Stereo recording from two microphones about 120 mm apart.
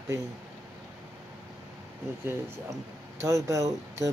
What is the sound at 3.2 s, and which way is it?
Mantra, 25° right (ahead or behind).